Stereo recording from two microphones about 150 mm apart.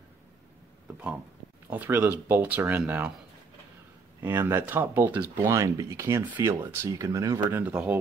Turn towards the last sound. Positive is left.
turn(degrees=-10)  # may be behind; listen again after turning